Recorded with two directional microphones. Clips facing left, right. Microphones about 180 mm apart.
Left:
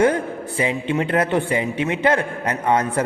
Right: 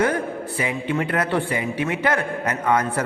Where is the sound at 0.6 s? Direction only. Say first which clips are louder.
Left 3 dB; 20° left (ahead or behind).